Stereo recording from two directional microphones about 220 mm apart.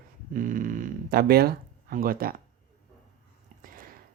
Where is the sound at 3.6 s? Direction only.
40° right (ahead or behind).